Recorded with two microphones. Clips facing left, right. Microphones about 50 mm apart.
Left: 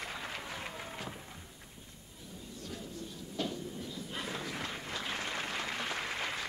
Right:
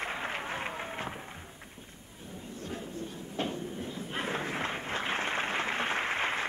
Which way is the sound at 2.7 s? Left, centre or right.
Right.